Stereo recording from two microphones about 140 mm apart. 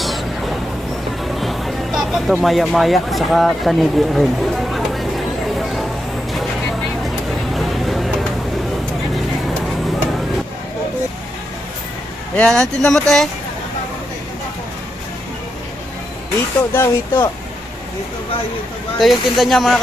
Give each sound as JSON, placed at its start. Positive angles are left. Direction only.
{"t": 0.0, "sound": "a sound", "side_deg": 0}
{"t": 1.2, "sound": "music", "side_deg": 0}
{"t": 6.3, "sound": "vehicle", "side_deg": 0}
{"t": 7.5, "sound": "a sound", "side_deg": 0}
{"t": 12.3, "sound": "speech", "side_deg": 5}
{"t": 16.6, "sound": "speech", "side_deg": 15}
{"t": 18.9, "sound": "speech", "side_deg": 0}